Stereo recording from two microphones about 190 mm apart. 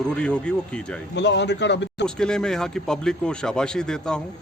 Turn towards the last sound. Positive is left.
turn(degrees=5)  # may be behind; listen again after turning